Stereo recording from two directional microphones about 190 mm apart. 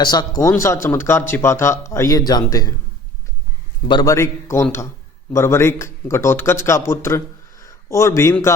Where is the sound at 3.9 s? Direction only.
20° left (ahead or behind).